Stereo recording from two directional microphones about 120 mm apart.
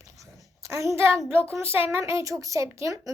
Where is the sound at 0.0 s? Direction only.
25° right (ahead or behind).